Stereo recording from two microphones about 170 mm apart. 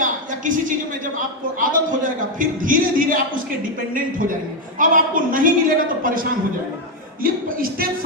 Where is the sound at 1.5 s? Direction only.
50° right (ahead or behind).